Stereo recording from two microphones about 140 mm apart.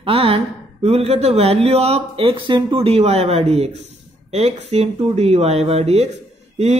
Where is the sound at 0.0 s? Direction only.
45° right (ahead or behind).